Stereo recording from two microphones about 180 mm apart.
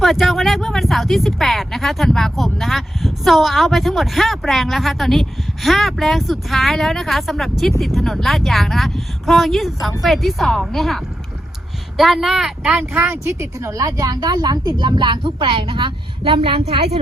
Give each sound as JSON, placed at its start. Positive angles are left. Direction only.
{"t": 0.0, "sound": "speech", "side_deg": 0}